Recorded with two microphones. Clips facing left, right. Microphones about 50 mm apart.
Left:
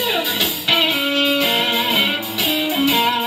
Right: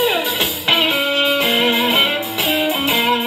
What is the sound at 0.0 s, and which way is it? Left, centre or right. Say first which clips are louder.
Music: right 3 dB; right.